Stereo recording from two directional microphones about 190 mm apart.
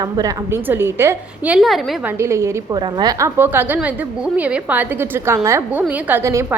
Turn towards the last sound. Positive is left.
turn(degrees=-15)  # may be behind; listen again after turning